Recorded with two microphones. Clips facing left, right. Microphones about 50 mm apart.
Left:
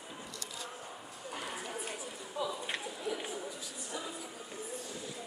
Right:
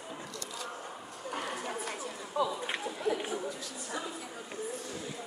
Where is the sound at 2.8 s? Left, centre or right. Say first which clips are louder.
Right 5 dB; right.